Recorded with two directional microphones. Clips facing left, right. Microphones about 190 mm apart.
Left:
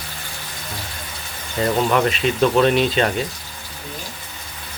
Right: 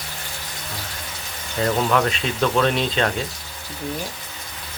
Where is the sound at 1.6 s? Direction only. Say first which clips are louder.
Left 2 dB; 10° left (ahead or behind).